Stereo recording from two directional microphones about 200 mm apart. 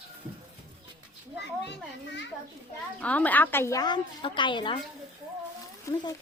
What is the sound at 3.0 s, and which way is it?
A woman's voice, 5° left (ahead or behind).